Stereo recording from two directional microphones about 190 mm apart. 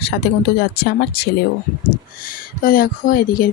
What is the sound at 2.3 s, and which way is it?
Speech, 50° left (ahead or behind).